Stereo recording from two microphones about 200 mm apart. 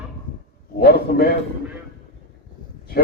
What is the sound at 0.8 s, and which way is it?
Speech, 50° left (ahead or behind).